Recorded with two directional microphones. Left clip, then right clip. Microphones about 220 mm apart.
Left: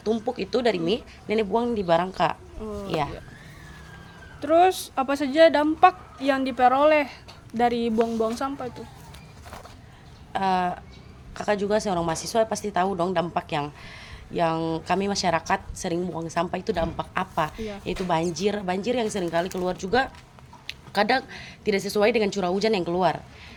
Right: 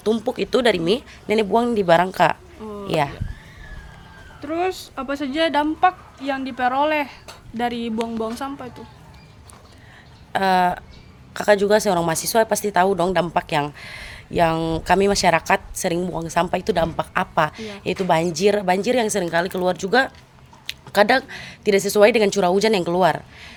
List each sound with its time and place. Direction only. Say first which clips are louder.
0.0 s a woman's voice: right 5 dB; 50° right (ahead or behind)
4.4 s speech: left 5 dB; 10° left (ahead or behind)
5.8 s speech: left 1 dB; 10° left (ahead or behind)
10.3 s a woman's voice: right 6 dB; 55° right (ahead or behind)